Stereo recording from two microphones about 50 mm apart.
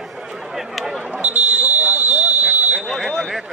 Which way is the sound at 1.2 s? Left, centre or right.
Right.